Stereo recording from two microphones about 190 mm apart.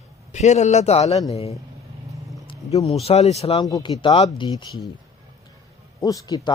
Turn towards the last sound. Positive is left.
turn(degrees=20)  # may be behind; listen again after turning